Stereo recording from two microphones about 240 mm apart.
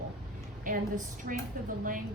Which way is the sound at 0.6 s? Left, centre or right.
Right.